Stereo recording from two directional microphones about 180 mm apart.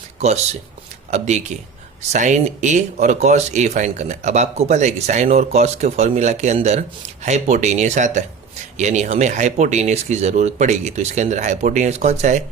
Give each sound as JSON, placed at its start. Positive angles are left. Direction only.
{"t": 1.1, "sound": "speech", "side_deg": -40}